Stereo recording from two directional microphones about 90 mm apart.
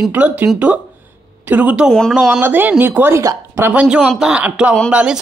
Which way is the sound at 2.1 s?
5° right (ahead or behind).